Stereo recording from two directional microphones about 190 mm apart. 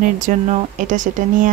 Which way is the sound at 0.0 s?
45° right (ahead or behind).